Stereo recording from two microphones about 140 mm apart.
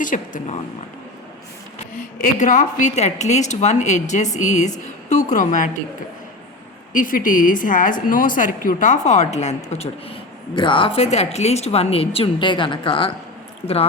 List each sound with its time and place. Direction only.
0.0 s speech: 70° left (ahead or behind)
1.8 s a woman's voice: 65° left (ahead or behind)
6.9 s a woman's voice: 75° left (ahead or behind); by 10.2 s 50° left (ahead or behind)
10.5 s a woman's voice: 35° left (ahead or behind)